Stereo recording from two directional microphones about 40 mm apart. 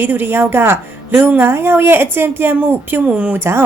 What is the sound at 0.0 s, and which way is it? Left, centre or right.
A woman's voice, right.